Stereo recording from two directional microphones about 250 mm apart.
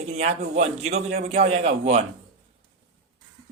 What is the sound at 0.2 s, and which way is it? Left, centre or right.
Speech, right.